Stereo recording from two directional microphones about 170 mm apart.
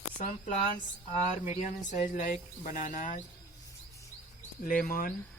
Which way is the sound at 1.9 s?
50° left (ahead or behind).